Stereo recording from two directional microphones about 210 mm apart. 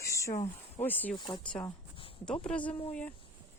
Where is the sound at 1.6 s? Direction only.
25° left (ahead or behind).